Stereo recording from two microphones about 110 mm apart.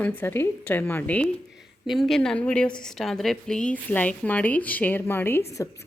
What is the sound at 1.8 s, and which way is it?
A woman's voice, centre (ahead or behind).